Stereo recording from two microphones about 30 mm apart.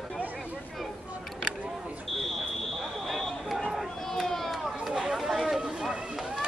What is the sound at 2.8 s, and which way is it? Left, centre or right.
Fire alarm, centre.